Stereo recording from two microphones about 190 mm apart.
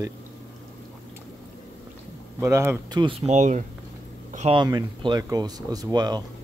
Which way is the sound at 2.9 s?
25° right (ahead or behind).